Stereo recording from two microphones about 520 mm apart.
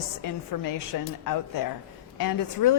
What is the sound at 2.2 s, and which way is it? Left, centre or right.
Speech, left.